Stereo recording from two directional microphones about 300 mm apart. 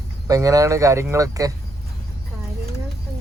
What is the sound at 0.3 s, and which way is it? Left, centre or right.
Speech, centre.